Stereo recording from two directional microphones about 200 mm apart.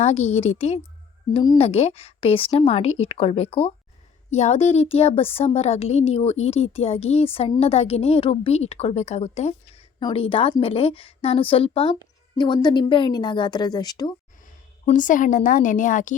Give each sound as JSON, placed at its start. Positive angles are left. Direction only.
{"t": 0.0, "sound": "a woman's voice", "side_deg": 35}
{"t": 14.8, "sound": "a woman's voice", "side_deg": 40}